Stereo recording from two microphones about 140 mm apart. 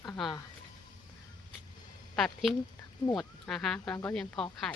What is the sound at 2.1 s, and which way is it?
Speech, centre (ahead or behind).